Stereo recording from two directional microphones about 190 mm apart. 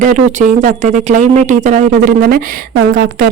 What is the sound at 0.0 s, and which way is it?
Speech, 40° right (ahead or behind).